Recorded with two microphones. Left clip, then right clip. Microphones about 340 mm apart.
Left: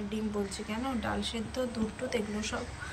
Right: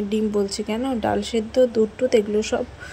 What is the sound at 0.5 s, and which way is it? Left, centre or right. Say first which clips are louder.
A woman's voice: right 10 dB; centre.